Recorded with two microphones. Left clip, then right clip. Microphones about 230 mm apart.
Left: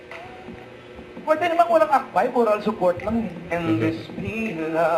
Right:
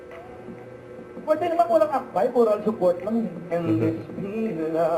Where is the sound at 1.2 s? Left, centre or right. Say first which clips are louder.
Left 2 dB; left.